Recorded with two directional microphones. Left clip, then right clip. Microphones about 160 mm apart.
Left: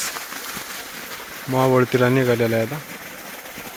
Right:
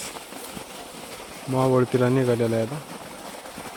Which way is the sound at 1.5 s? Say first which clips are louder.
Left 4 dB; 25° left (ahead or behind).